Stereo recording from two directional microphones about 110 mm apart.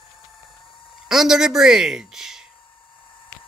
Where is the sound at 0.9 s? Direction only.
5° right (ahead or behind).